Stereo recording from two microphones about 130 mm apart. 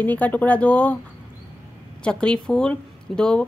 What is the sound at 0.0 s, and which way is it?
Speech, 10° left (ahead or behind).